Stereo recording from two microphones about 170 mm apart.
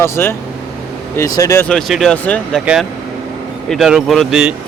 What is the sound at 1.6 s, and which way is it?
Speech, centre (ahead or behind).